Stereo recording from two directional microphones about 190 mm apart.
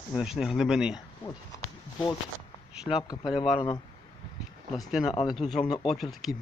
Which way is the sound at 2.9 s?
15° left (ahead or behind).